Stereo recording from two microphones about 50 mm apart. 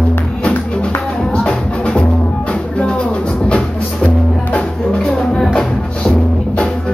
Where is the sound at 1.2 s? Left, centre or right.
Centre.